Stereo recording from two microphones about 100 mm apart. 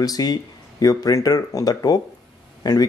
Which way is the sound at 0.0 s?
40° left (ahead or behind).